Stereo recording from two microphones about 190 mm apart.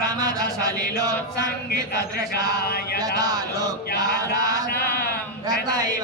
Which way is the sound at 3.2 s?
20° right (ahead or behind).